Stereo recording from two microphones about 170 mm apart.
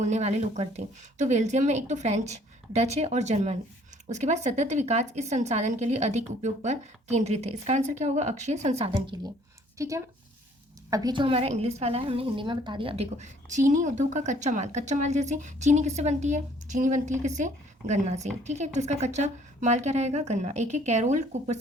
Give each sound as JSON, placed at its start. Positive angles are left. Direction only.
{"t": 0.0, "sound": "a woman's voice", "side_deg": -40}
{"t": 9.7, "sound": "a woman's voice", "side_deg": -20}